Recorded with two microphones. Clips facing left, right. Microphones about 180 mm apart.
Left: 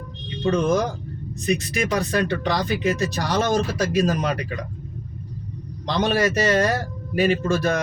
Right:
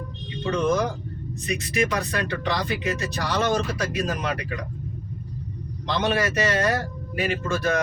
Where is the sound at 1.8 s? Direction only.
35° left (ahead or behind).